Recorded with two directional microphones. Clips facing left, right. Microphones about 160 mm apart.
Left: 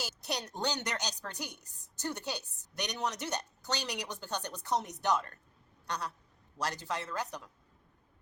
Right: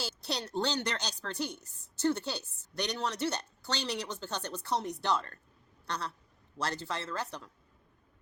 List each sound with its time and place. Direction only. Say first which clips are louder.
0.0 s a woman's voice: right 1 dB; 15° left (ahead or behind)
5.8 s a sound: even; 15° left (ahead or behind)
6.6 s a woman's voice: right 1 dB; 15° left (ahead or behind)